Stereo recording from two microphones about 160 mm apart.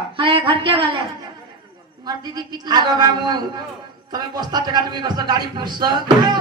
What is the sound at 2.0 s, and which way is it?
A man's voice, 25° right (ahead or behind).